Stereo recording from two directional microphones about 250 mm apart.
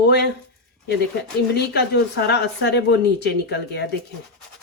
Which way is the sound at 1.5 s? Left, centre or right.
Left.